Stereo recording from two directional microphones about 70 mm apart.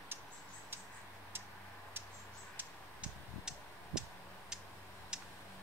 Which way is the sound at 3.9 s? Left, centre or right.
Centre.